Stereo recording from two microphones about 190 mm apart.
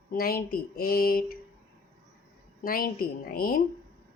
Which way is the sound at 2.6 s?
50° left (ahead or behind).